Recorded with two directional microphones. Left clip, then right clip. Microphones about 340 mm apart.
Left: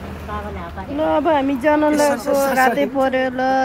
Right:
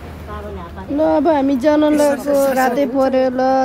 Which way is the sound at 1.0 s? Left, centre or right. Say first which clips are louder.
Right 2 dB; left.